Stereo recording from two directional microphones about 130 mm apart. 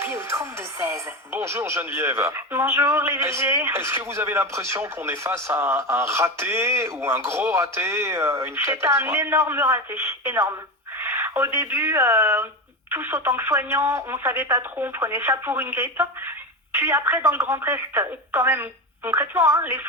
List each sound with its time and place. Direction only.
0.0 s speech: 20° right (ahead or behind)